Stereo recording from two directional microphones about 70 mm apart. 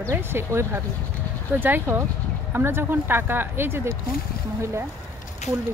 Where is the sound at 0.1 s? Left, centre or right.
Right.